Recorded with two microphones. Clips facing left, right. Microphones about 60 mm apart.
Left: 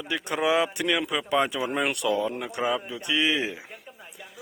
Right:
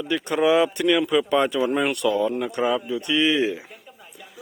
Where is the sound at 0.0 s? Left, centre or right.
Centre.